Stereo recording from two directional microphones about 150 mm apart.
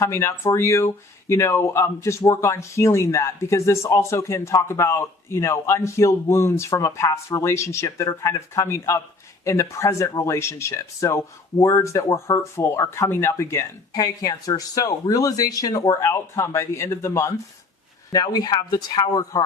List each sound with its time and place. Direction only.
0.0 s speech: 20° left (ahead or behind)